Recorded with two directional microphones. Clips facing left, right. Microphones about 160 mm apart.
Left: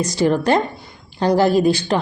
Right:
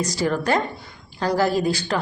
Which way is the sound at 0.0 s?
20° left (ahead or behind).